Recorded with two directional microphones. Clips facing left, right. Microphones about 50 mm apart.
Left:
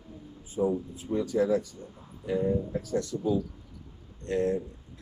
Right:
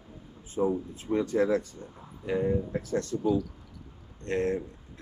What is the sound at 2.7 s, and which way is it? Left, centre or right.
Speech, right.